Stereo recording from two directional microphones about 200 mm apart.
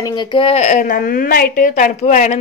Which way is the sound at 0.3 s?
30° left (ahead or behind).